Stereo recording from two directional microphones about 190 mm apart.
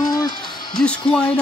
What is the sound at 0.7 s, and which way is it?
Music, 5° left (ahead or behind).